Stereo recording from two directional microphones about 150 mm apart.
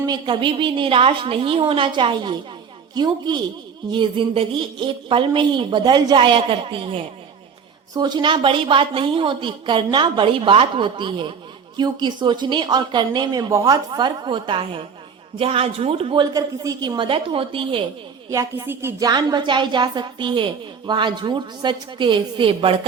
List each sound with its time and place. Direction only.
0.0 s a woman's voice: 30° right (ahead or behind)
16.3 s a woman's voice: 25° right (ahead or behind)
18.3 s a woman's voice: 20° right (ahead or behind); by 22.9 s 35° right (ahead or behind)